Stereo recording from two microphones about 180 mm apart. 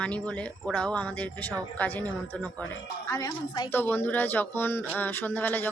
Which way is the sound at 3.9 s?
10° left (ahead or behind).